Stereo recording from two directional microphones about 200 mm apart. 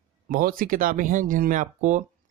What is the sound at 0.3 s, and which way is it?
Speech, 45° right (ahead or behind).